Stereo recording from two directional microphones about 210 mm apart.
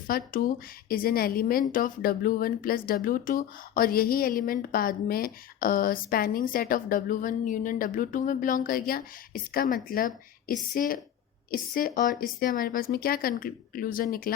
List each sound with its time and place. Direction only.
0.1 s a woman's voice: 45° left (ahead or behind)